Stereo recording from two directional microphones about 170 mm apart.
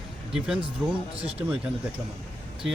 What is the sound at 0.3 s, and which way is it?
Speech, 5° right (ahead or behind).